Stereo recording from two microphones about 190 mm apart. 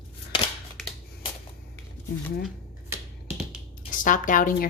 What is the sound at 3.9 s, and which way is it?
Speech, 45° left (ahead or behind).